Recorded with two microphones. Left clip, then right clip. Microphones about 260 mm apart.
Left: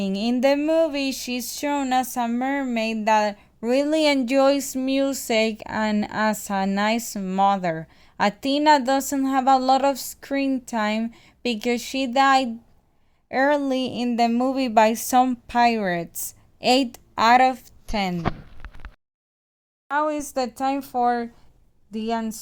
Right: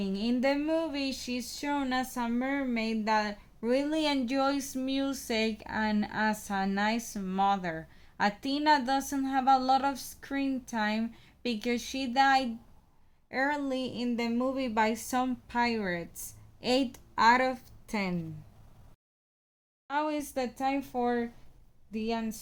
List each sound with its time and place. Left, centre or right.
0.0 s speech: left
19.9 s speech: centre